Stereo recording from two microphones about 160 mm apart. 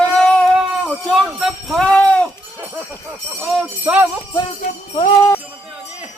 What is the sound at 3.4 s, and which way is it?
Jingle bell, 5° right (ahead or behind).